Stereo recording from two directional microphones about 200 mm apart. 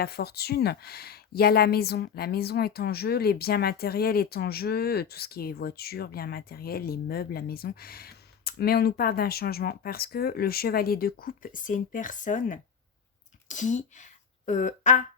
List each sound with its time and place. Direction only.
0.0 s speech: 50° left (ahead or behind)